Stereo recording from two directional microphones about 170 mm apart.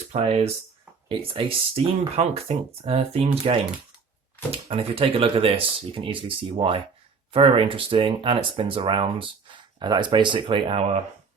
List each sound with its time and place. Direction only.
0.1 s speech: 40° right (ahead or behind)